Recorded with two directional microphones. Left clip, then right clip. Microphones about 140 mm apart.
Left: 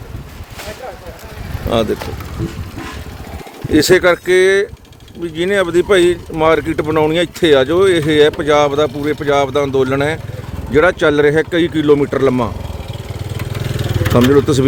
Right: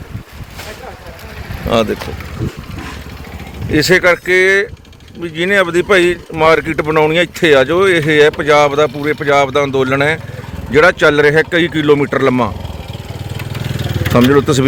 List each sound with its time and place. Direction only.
1.7 s speech: centre (ahead or behind)
3.7 s speech: 35° left (ahead or behind)
5.2 s speech: 10° left (ahead or behind)
13.5 s vehicle: 20° right (ahead or behind)
14.1 s speech: 5° right (ahead or behind)